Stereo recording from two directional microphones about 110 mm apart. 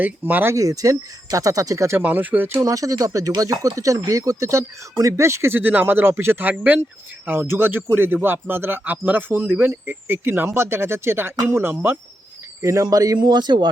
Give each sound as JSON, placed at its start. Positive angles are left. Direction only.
{"t": 0.0, "sound": "speech", "side_deg": -15}
{"t": 0.5, "sound": "a man's voice", "side_deg": -30}
{"t": 2.6, "sound": "a man's voice", "side_deg": -30}
{"t": 12.6, "sound": "speech", "side_deg": -30}